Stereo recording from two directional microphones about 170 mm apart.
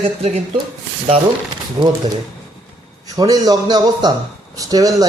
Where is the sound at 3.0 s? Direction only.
20° right (ahead or behind).